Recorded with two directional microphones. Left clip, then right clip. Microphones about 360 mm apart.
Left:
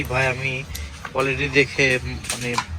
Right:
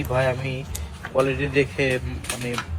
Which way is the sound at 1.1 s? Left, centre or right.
Centre.